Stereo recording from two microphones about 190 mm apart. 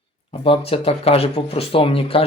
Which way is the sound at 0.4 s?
30° left (ahead or behind).